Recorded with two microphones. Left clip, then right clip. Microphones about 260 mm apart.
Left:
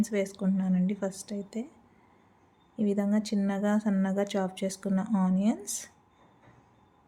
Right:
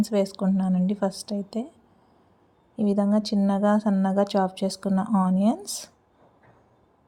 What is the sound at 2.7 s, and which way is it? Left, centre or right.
Speech, centre.